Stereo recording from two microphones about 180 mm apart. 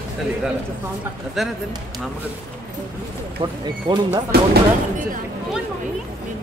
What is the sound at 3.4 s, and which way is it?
Speech, 25° right (ahead or behind).